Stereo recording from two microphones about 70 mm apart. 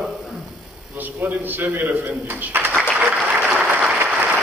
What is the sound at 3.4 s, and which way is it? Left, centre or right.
Applause, centre.